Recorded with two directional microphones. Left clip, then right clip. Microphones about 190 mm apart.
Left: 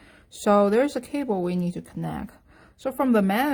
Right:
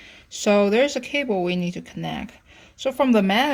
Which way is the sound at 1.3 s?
30° left (ahead or behind).